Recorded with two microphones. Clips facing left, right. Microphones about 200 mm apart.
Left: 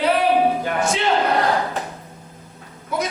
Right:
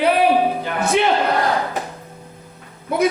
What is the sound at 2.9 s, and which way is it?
Speech, 55° right (ahead or behind).